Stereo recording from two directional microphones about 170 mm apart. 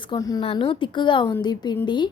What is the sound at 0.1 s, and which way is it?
Speech, 25° left (ahead or behind).